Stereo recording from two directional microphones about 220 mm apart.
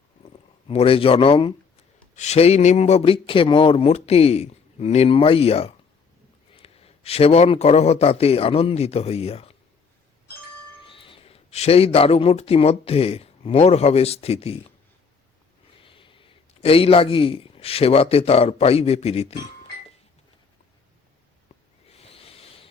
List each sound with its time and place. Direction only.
0.7 s a man's voice: 25° left (ahead or behind)
10.8 s speech: 25° left (ahead or behind)
15.8 s a man's voice: 25° left (ahead or behind)
21.9 s a sound: 25° left (ahead or behind)